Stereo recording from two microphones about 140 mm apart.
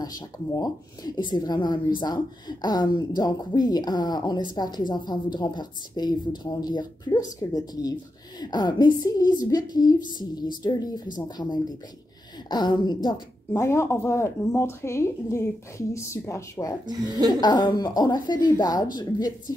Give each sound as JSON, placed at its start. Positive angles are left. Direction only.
{"t": 0.6, "sound": "a woman's voice", "side_deg": 30}
{"t": 13.5, "sound": "speech", "side_deg": 20}
{"t": 16.8, "sound": "speech", "side_deg": -30}
{"t": 17.3, "sound": "speech", "side_deg": 30}